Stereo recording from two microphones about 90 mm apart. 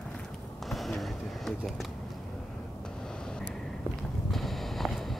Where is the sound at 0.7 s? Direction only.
Centre (ahead or behind).